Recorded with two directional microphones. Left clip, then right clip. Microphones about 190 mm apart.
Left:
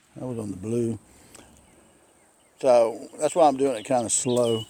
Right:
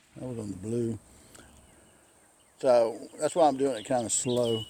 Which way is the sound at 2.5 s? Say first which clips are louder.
Left 4 dB; 30° left (ahead or behind).